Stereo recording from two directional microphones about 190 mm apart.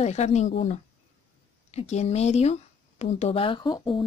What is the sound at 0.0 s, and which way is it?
Speech, 35° left (ahead or behind).